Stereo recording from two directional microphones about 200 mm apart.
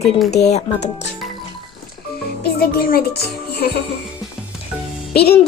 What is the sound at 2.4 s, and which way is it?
Speech, 50° left (ahead or behind).